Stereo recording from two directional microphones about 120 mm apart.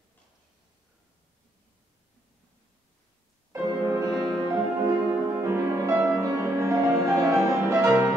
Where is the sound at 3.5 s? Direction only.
25° right (ahead or behind).